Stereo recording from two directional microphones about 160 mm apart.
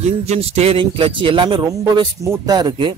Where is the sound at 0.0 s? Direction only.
40° right (ahead or behind).